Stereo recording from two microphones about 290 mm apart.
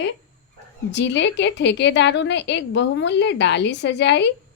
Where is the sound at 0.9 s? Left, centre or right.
Left.